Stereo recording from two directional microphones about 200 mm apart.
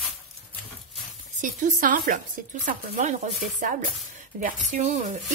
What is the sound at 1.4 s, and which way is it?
Speech, 40° right (ahead or behind).